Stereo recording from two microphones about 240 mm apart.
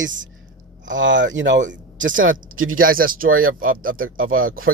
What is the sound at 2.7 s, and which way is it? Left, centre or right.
Speech, right.